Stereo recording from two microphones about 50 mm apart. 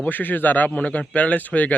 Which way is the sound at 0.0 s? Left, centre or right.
Left.